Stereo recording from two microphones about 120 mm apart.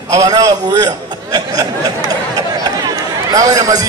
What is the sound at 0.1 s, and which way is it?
A man's voice, 30° right (ahead or behind).